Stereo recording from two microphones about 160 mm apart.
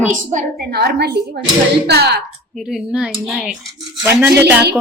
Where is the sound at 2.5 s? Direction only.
5° right (ahead or behind).